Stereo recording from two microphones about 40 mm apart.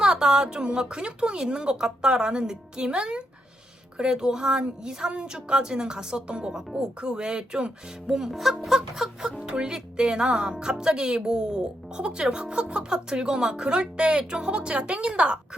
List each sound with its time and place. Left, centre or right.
0.0 s a sound: centre
0.4 s speech: right
8.2 s speech: centre
9.4 s speech: right